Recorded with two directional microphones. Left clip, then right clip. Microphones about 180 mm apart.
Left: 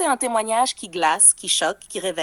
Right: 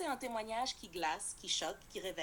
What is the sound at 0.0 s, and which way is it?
A woman's voice, 45° left (ahead or behind).